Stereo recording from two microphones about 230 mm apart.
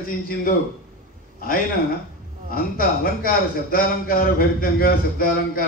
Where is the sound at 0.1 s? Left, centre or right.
Left.